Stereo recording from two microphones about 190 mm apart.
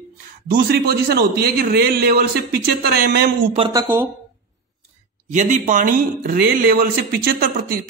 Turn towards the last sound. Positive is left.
turn(degrees=-50)  # may be behind; listen again after turning